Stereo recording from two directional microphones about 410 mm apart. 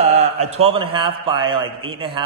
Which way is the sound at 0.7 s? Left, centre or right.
Centre.